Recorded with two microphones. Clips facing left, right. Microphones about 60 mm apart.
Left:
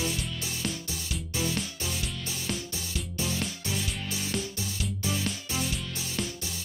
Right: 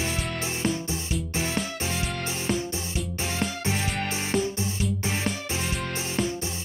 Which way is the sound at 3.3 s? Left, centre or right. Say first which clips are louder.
Right 5 dB; right.